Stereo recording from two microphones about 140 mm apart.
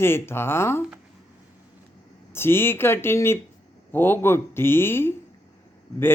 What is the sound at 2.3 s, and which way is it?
Speech, 15° left (ahead or behind).